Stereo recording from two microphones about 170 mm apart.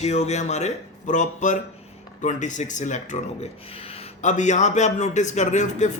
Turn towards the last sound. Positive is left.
turn(degrees=45)  # may be behind; listen again after turning